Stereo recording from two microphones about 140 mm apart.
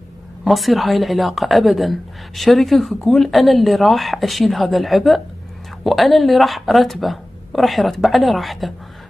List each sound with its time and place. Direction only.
0.4 s a woman's voice: centre (ahead or behind)